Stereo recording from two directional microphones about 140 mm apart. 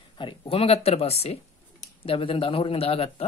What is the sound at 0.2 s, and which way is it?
Speech, 40° left (ahead or behind).